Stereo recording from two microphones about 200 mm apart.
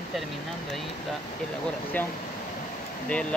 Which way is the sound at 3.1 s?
5° left (ahead or behind).